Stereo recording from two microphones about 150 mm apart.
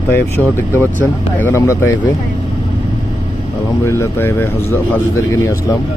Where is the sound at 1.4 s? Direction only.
15° left (ahead or behind).